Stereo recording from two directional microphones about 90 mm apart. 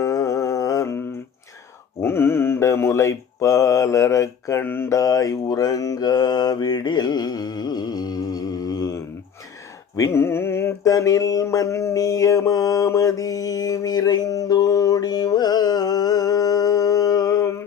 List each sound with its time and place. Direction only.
0.0 s music: 35° left (ahead or behind)
2.0 s mantra: 25° left (ahead or behind)
4.9 s mantra: 40° left (ahead or behind)
9.9 s mantra: 35° left (ahead or behind)